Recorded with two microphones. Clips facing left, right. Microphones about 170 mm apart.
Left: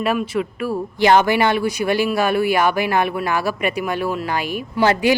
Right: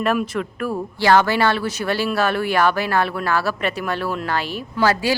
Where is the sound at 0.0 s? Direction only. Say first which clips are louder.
Left 1 dB; 5° left (ahead or behind).